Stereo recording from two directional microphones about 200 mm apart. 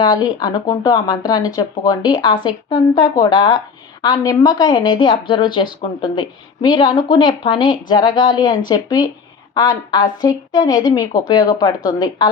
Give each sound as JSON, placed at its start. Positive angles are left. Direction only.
{"t": 0.0, "sound": "a woman's voice", "side_deg": 20}